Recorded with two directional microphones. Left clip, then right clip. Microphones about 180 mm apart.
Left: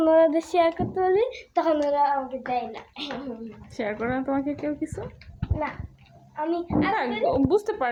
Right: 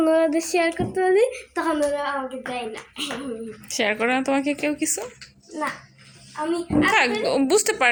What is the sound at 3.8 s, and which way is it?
Speech, 25° right (ahead or behind).